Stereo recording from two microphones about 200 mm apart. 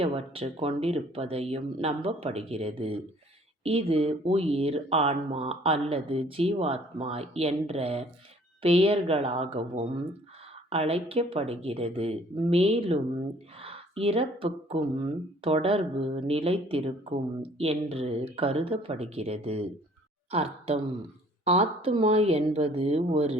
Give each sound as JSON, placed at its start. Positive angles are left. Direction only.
{"t": 0.0, "sound": "speech", "side_deg": -25}